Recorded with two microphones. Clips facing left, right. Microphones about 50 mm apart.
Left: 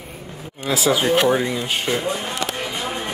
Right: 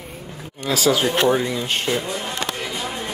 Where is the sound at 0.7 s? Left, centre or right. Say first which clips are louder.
Left 1 dB; centre.